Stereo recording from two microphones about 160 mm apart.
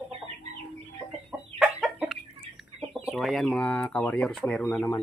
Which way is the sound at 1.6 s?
5° right (ahead or behind).